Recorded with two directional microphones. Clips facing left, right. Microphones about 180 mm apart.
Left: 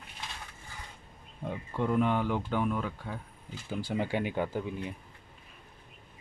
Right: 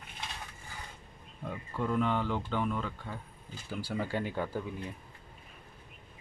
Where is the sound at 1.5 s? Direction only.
20° left (ahead or behind).